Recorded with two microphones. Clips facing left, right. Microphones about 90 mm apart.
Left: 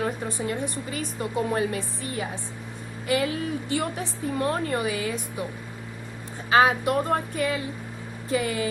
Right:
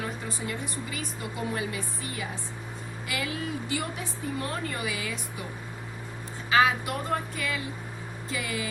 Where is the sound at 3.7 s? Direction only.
50° left (ahead or behind).